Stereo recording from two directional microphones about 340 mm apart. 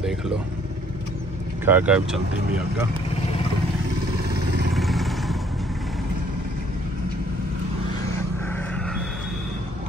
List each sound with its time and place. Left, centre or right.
1.7 s speech: centre
4.7 s vehicle: centre